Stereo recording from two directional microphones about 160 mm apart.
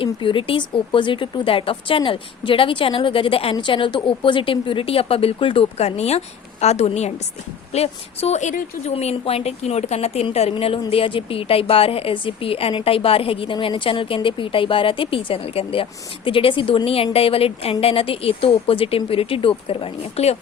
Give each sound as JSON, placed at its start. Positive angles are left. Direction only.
{"t": 0.0, "sound": "a woman's voice", "side_deg": 30}